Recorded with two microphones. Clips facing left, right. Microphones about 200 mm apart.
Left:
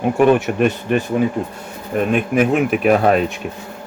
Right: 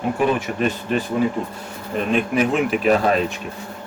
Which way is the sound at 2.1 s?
55° left (ahead or behind).